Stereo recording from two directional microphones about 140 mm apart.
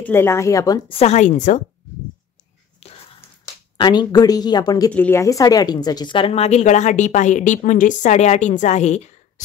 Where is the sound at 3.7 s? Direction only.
30° left (ahead or behind).